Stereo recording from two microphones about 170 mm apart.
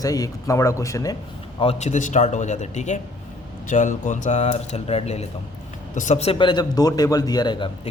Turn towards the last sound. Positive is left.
turn(degrees=25)  # may be behind; listen again after turning